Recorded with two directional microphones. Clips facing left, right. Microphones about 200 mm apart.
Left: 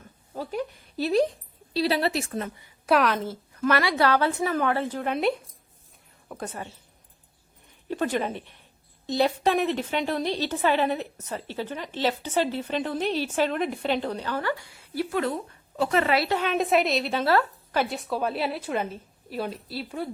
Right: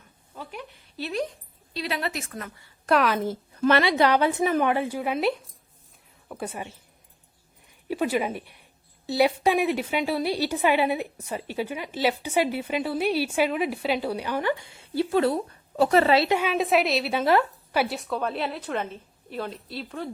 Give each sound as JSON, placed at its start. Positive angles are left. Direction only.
{"t": 0.3, "sound": "a sound", "side_deg": 40}
{"t": 1.7, "sound": "a woman's voice", "side_deg": 35}
{"t": 2.8, "sound": "a woman's voice", "side_deg": 0}
{"t": 3.6, "sound": "a woman's voice", "side_deg": -25}
{"t": 7.9, "sound": "a woman's voice", "side_deg": -10}
{"t": 16.5, "sound": "a woman's voice", "side_deg": 0}
{"t": 17.1, "sound": "a woman's voice", "side_deg": -15}